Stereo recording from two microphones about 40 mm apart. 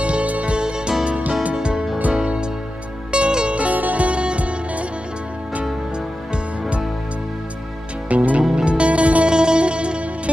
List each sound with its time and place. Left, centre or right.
0.0 s music: right
1.0 s music: right
3.1 s music: right
3.5 s music: right
8.1 s music: right
8.4 s music: centre
8.6 s music: right